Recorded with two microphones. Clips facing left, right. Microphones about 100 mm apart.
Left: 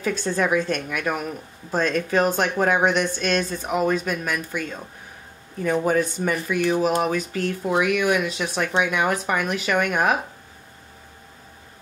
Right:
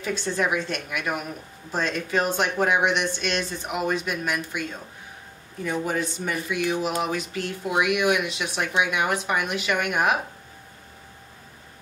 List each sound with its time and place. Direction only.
0.0 s speech: 45° left (ahead or behind)